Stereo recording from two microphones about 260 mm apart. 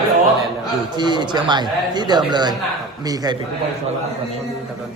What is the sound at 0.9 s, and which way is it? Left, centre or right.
Speech, centre.